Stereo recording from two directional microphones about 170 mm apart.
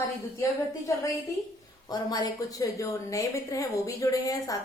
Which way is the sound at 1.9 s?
20° left (ahead or behind).